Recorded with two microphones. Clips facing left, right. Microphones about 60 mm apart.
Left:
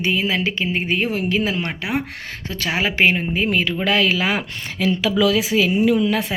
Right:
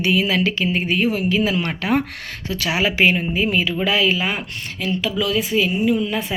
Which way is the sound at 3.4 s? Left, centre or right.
Left.